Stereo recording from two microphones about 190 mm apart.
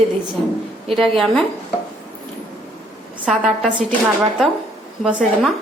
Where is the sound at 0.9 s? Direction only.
Centre (ahead or behind).